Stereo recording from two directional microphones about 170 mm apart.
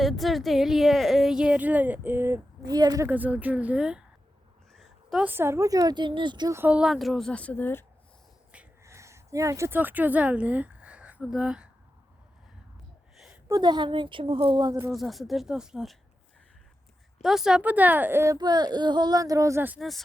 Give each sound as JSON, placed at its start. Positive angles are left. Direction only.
{"t": 0.0, "sound": "a woman's voice", "side_deg": 0}
{"t": 3.1, "sound": "a woman's voice", "side_deg": -10}
{"t": 6.6, "sound": "a woman's voice", "side_deg": -5}
{"t": 8.5, "sound": "a sound", "side_deg": -15}
{"t": 13.1, "sound": "a sound", "side_deg": -5}
{"t": 13.5, "sound": "a woman's voice", "side_deg": -25}
{"t": 14.9, "sound": "a woman's voice", "side_deg": 0}
{"t": 17.2, "sound": "speech", "side_deg": -5}